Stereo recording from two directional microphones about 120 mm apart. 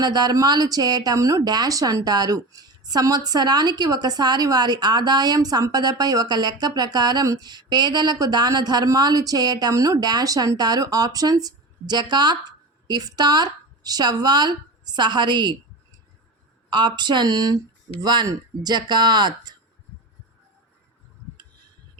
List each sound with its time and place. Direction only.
0.0 s speech: 35° right (ahead or behind)
16.6 s speech: 40° right (ahead or behind)